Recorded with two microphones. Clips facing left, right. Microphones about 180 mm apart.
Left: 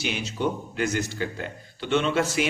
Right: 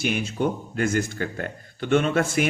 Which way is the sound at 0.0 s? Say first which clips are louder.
Right 3 dB; 50° right (ahead or behind).